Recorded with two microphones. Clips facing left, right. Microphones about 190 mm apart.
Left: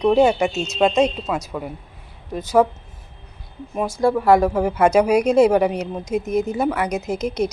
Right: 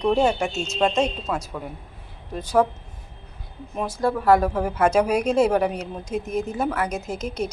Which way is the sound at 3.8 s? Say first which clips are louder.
Left 5 dB; 10° left (ahead or behind).